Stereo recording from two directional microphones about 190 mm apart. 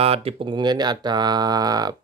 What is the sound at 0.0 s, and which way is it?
Speech, 30° right (ahead or behind).